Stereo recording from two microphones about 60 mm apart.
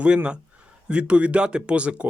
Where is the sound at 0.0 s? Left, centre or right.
Centre.